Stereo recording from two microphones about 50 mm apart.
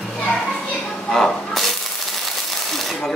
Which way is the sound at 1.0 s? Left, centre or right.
Centre.